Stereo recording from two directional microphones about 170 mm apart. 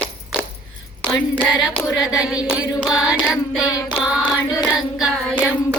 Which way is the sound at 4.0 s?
5° right (ahead or behind).